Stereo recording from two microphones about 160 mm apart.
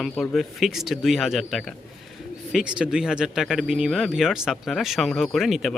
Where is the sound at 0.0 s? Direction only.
Centre (ahead or behind).